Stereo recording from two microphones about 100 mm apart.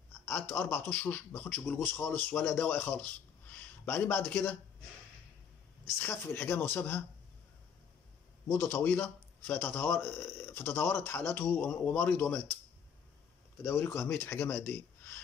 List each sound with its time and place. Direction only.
0.3 s a man's voice: 20° left (ahead or behind)
5.9 s a man's voice: 20° left (ahead or behind)
8.5 s a man's voice: 20° left (ahead or behind)
13.6 s a man's voice: 20° left (ahead or behind)